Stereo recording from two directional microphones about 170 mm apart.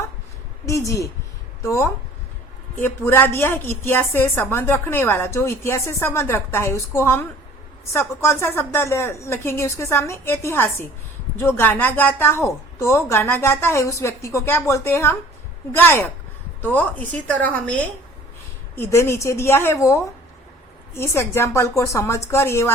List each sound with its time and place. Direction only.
0.6 s a woman's voice: 20° left (ahead or behind)